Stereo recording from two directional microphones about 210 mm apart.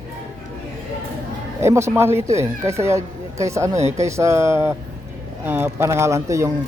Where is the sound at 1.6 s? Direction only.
10° right (ahead or behind).